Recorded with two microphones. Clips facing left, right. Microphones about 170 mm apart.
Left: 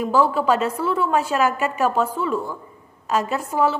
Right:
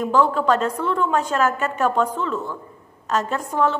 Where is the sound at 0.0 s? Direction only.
10° left (ahead or behind).